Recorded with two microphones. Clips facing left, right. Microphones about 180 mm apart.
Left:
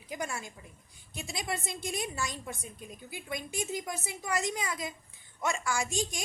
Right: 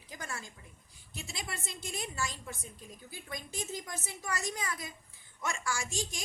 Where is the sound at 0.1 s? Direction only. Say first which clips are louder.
Left 6 dB; 15° left (ahead or behind).